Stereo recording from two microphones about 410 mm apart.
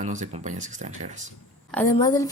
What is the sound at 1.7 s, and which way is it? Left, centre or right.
Speech, centre.